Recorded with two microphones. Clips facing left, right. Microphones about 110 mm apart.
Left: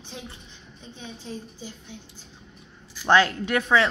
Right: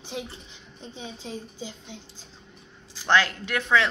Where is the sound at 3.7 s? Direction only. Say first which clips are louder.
Left 1 dB; 20° left (ahead or behind).